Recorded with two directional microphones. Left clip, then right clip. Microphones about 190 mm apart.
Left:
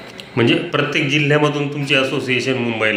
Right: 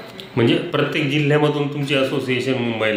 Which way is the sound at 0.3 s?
5° right (ahead or behind).